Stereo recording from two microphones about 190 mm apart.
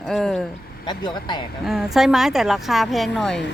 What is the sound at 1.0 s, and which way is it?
Speech, 25° left (ahead or behind).